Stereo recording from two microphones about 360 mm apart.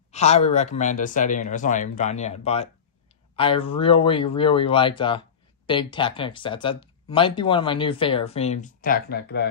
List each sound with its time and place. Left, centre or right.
0.1 s speech: centre